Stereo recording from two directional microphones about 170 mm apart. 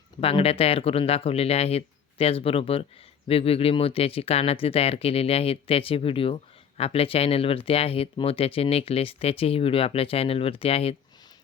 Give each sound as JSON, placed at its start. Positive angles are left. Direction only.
{"t": 0.2, "sound": "speech", "side_deg": 35}